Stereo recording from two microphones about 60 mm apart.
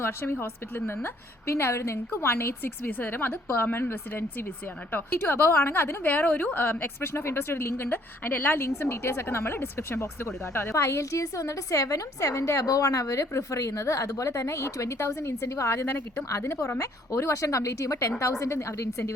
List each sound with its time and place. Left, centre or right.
0.0 s a woman's voice: left
8.6 s a woman's voice: left
16.4 s a woman's voice: left